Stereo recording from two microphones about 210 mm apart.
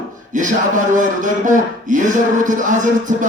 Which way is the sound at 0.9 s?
35° right (ahead or behind).